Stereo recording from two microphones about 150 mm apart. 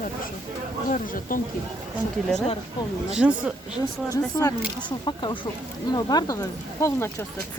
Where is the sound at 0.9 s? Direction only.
65° left (ahead or behind).